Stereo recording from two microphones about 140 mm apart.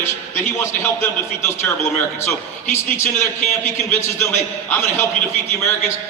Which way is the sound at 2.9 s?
20° left (ahead or behind).